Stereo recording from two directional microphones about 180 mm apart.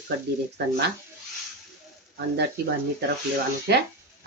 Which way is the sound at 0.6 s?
70° right (ahead or behind).